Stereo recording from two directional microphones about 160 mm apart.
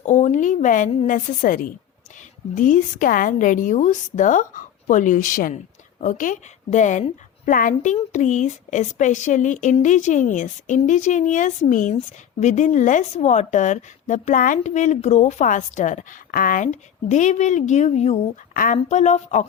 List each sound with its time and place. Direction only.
0.0 s a woman's voice: 45° left (ahead or behind)
17.1 s speech: 50° left (ahead or behind)
18.5 s speech: 55° left (ahead or behind)